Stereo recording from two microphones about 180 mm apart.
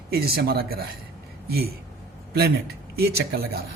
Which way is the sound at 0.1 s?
55° right (ahead or behind).